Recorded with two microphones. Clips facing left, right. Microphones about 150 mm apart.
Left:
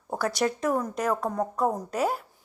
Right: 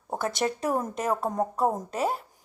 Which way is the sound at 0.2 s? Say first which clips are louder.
Left 2 dB; 25° right (ahead or behind).